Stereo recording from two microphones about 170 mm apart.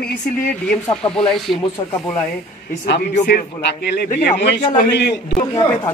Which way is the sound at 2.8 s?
90° left.